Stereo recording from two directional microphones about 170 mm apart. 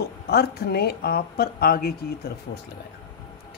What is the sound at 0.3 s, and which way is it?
Speech, 70° left (ahead or behind).